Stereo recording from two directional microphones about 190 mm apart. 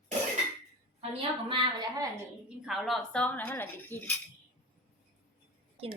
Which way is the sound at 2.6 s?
Centre (ahead or behind).